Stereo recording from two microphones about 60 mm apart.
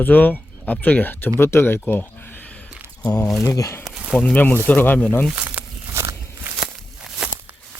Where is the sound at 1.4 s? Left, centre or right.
Left.